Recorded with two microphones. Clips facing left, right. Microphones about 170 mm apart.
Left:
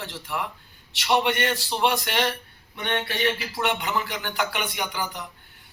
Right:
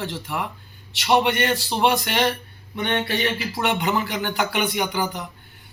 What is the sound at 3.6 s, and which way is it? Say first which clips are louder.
Speech: right 7 dB; 5° right (ahead or behind).